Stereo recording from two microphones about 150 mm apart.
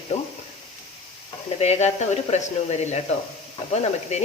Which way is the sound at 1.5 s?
45° left (ahead or behind).